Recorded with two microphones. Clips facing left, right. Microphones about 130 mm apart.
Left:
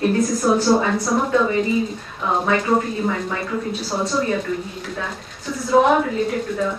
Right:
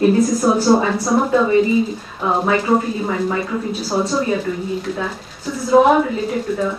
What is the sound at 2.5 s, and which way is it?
Speech, 5° right (ahead or behind).